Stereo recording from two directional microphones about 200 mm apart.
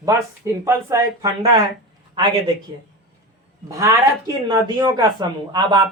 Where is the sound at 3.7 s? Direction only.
15° right (ahead or behind).